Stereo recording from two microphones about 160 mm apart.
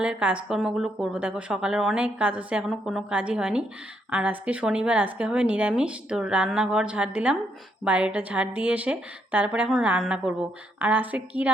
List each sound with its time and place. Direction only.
0.0 s a woman's voice: 5° right (ahead or behind)